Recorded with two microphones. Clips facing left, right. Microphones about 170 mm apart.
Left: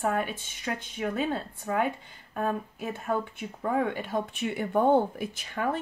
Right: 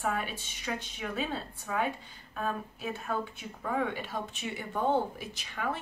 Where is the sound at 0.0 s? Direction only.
50° left (ahead or behind).